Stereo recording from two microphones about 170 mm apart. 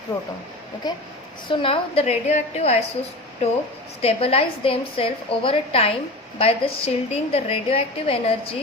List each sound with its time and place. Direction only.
0.8 s a woman's voice: 25° left (ahead or behind); by 2.7 s 40° left (ahead or behind)
4.0 s a woman's voice: 35° left (ahead or behind)